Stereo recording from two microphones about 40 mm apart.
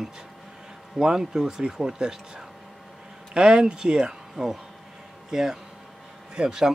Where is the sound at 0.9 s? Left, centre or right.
Centre.